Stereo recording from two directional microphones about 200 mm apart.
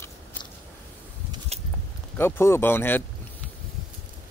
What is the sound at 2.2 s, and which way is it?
Speech, 10° left (ahead or behind).